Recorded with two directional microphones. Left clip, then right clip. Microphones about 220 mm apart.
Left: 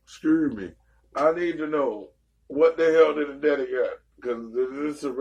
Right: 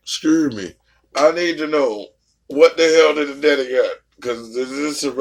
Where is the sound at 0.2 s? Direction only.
55° right (ahead or behind).